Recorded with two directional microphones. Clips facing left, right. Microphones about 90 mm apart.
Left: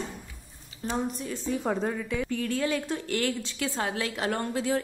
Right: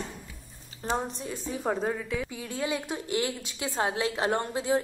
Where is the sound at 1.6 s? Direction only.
5° right (ahead or behind); by 4.8 s 20° right (ahead or behind).